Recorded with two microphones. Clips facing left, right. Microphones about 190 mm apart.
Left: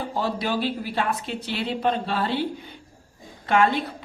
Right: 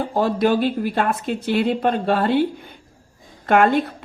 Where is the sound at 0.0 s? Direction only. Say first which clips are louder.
Right 8 dB; 50° right (ahead or behind).